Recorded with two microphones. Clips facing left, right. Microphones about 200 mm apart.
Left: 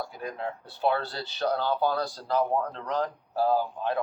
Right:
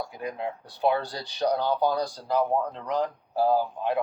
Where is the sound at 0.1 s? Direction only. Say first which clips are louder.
Right 2 dB; 15° right (ahead or behind).